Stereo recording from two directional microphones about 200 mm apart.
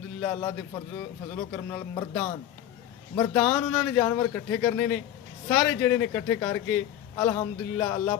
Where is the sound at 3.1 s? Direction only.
15° left (ahead or behind).